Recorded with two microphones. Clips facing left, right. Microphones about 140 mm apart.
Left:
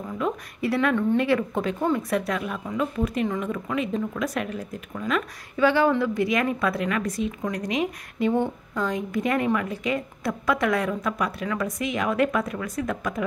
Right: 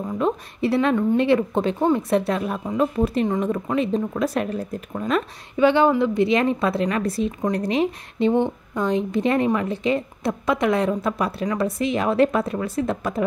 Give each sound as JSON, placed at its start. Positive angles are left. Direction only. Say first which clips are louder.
{"t": 0.0, "sound": "a woman's voice", "louder": "right 5 dB", "side_deg": -25}
{"t": 5.6, "sound": "a woman's voice", "louder": "right 3 dB", "side_deg": -20}